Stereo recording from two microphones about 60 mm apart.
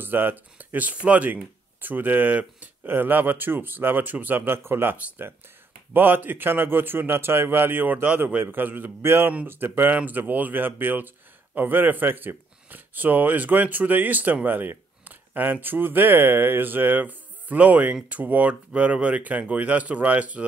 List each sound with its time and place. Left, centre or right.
0.0 s speech: right
9.0 s speech: right